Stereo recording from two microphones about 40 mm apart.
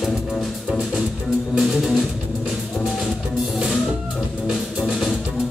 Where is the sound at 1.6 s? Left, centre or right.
Centre.